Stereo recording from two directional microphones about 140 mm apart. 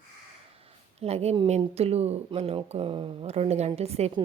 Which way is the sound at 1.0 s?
50° right (ahead or behind).